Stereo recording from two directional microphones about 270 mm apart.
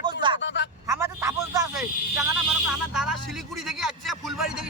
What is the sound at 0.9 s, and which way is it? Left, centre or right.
A man's voice, centre.